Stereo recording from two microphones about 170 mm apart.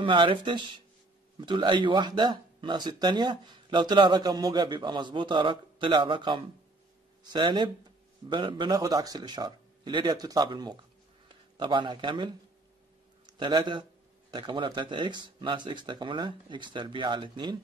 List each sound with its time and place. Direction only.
0.0 s a man's voice: 30° right (ahead or behind)